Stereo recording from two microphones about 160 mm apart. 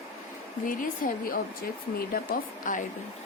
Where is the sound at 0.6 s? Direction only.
60° left (ahead or behind).